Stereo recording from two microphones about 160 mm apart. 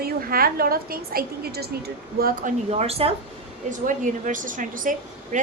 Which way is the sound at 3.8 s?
55° right (ahead or behind).